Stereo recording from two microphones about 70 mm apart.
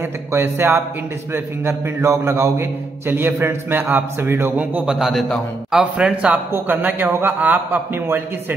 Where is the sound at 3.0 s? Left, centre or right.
Right.